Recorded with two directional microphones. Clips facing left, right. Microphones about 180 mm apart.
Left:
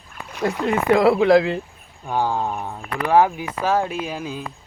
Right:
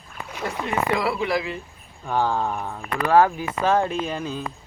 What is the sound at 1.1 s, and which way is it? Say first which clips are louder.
Speech: left 10 dB; 90° left.